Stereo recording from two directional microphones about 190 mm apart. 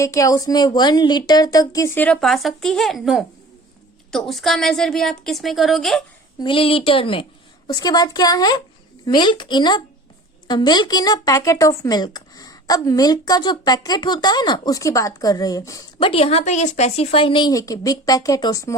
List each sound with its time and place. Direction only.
0.0 s a woman's voice: 15° left (ahead or behind); by 6.0 s centre (ahead or behind)
6.4 s speech: 30° left (ahead or behind)
16.0 s speech: 30° left (ahead or behind)